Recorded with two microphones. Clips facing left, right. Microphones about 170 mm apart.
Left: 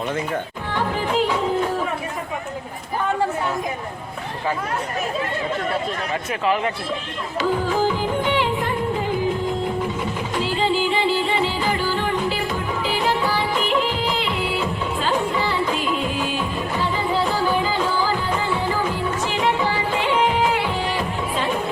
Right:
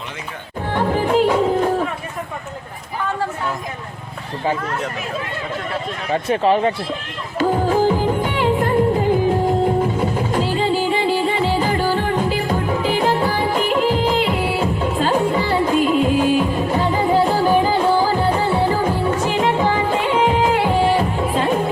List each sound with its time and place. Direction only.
0.7 s music: 50° right (ahead or behind)
6.3 s speech: 30° right (ahead or behind)
7.3 s music: 50° right (ahead or behind)